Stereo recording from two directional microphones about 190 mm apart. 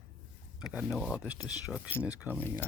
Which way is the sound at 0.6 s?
5° right (ahead or behind).